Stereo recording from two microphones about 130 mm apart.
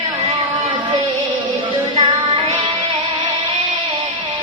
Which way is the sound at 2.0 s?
40° right (ahead or behind).